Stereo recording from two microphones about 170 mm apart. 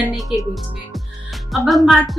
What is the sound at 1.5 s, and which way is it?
Speech, centre (ahead or behind).